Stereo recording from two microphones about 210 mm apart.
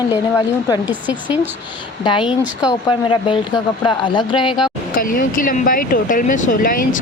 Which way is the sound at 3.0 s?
25° left (ahead or behind).